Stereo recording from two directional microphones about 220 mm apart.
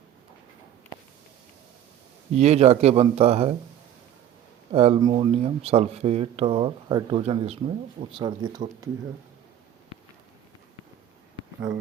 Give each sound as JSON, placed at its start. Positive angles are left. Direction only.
{"t": 2.3, "sound": "speech", "side_deg": -30}
{"t": 4.7, "sound": "speech", "side_deg": -25}
{"t": 8.2, "sound": "speech", "side_deg": -20}